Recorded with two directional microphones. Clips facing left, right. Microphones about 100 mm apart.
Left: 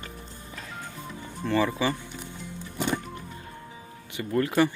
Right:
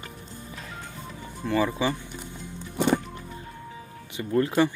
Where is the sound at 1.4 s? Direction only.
10° right (ahead or behind).